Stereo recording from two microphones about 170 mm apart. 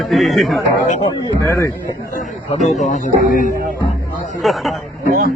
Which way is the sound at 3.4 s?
55° right (ahead or behind).